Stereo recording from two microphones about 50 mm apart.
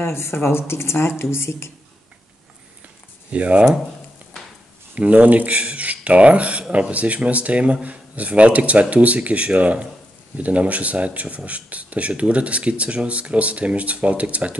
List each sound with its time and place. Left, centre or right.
0.0 s speech: left
3.3 s speech: right
4.9 s speech: right